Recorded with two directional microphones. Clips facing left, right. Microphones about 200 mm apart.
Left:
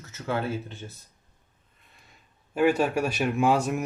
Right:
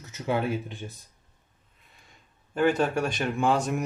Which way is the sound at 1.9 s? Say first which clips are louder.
Even; centre (ahead or behind).